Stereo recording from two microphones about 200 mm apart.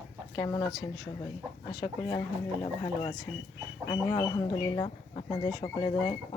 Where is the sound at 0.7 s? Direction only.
Centre (ahead or behind).